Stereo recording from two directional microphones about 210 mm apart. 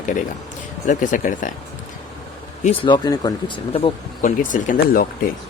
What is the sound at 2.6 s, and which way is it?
Speech, 20° left (ahead or behind).